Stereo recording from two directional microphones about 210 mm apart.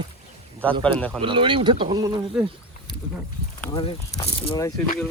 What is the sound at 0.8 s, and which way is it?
Speech, 5° left (ahead or behind).